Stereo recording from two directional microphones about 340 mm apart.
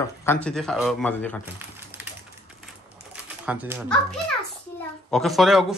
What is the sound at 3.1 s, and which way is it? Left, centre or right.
Typewriter, centre.